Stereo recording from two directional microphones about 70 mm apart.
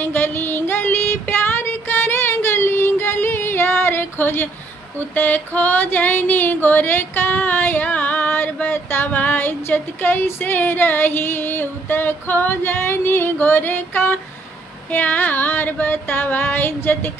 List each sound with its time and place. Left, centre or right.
0.0 s child singing: left
4.9 s female singing: left